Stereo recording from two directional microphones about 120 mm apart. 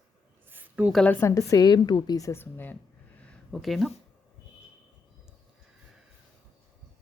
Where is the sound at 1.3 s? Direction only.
30° left (ahead or behind).